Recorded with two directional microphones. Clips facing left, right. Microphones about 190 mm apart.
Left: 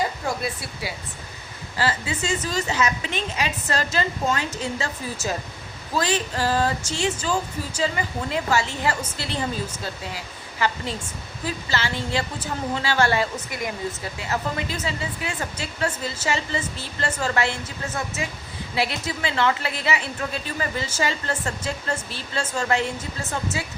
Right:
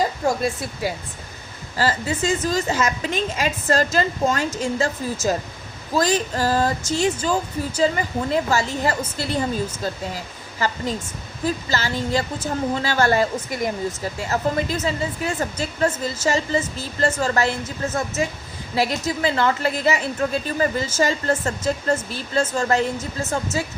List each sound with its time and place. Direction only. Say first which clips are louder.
0.3 s a woman's voice: right 6 dB; 45° right (ahead or behind)
11.4 s speech: right 4 dB; 40° right (ahead or behind)